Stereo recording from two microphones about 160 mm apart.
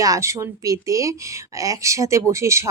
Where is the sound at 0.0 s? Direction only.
20° right (ahead or behind).